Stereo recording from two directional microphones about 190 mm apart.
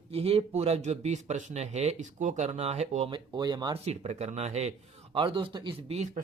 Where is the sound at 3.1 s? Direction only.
25° right (ahead or behind).